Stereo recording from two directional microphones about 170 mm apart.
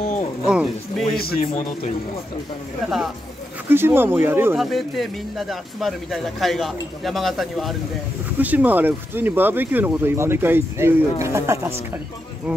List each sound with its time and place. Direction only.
0.5 s speech: 5° right (ahead or behind)
1.1 s a man's voice: 65° left (ahead or behind)
1.4 s speech: 35° left (ahead or behind)
2.8 s speech: centre (ahead or behind)
3.6 s speech: 15° right (ahead or behind)
4.6 s speech: centre (ahead or behind); by 11.7 s 15° right (ahead or behind)